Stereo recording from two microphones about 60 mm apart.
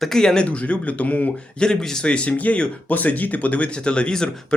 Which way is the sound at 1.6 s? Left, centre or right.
Centre.